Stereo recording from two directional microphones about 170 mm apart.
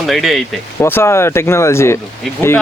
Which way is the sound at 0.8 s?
15° left (ahead or behind).